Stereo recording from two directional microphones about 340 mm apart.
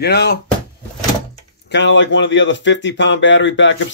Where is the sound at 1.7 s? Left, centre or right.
Left.